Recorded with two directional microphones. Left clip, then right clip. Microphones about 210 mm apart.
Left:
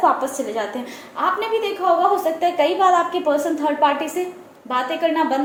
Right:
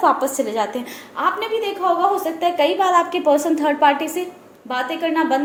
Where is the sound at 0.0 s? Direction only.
35° right (ahead or behind).